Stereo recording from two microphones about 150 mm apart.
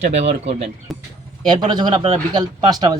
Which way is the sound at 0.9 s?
Centre (ahead or behind).